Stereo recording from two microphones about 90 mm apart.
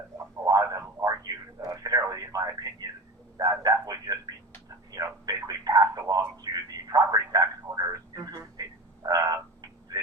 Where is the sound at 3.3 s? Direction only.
45° right (ahead or behind).